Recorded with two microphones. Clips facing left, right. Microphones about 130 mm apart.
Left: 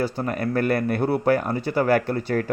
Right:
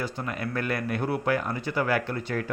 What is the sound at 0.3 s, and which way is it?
A man's voice, 45° left (ahead or behind).